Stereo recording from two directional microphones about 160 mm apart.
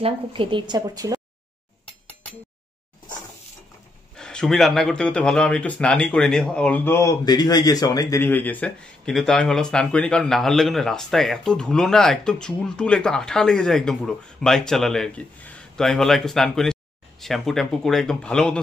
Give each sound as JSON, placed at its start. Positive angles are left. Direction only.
{"t": 0.0, "sound": "a woman's voice", "side_deg": -35}
{"t": 4.2, "sound": "speech", "side_deg": 5}